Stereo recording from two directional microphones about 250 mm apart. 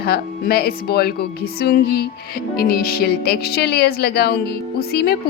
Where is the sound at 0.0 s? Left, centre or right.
Left.